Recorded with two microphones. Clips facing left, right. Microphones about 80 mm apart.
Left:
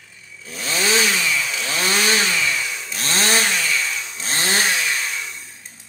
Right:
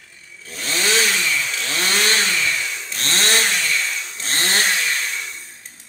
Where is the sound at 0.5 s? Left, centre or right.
Centre.